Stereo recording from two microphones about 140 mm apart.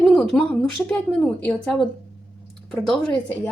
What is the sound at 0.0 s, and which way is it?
A woman's voice, 5° left (ahead or behind).